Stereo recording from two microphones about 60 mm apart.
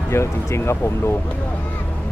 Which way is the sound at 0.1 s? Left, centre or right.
Left.